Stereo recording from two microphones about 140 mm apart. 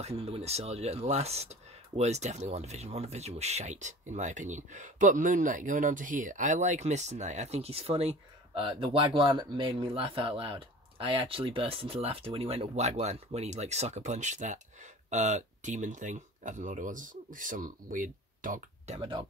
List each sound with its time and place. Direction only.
0.0 s speech: 45° right (ahead or behind); by 18.9 s 70° right (ahead or behind)
18.9 s speech: 35° right (ahead or behind)